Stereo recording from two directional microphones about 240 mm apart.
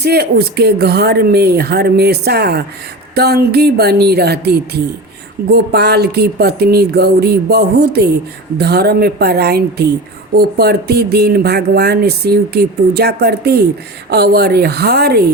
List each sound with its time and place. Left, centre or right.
0.0 s speech: right